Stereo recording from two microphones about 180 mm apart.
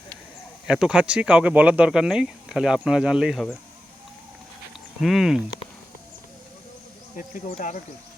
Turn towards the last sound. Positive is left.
turn(degrees=45)  # may be behind; listen again after turning